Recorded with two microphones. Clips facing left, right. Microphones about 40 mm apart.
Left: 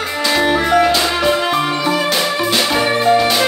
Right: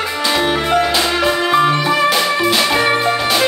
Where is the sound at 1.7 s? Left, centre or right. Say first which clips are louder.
Right 2 dB; right.